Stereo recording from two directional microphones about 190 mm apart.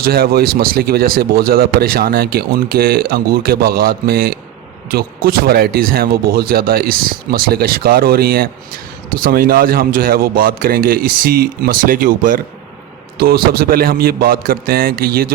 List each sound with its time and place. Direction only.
0.0 s speech: 55° right (ahead or behind)